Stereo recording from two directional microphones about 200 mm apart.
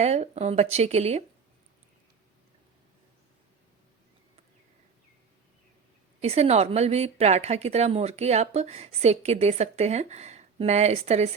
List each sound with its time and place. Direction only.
0.0 s a woman's voice: 35° right (ahead or behind)
6.2 s a woman's voice: 30° right (ahead or behind)